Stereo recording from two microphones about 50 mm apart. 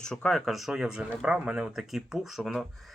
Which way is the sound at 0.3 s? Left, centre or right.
Centre.